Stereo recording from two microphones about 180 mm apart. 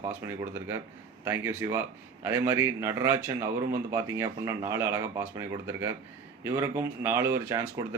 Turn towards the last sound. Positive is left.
turn(degrees=-15)  # may be behind; listen again after turning